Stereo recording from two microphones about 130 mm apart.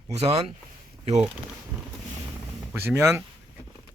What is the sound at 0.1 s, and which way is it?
Speech, 55° right (ahead or behind).